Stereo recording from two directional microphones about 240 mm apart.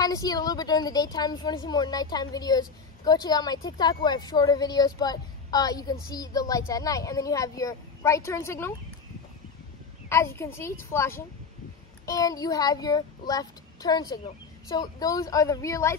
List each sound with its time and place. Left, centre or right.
0.0 s a child's voice: centre
10.0 s a child's voice: centre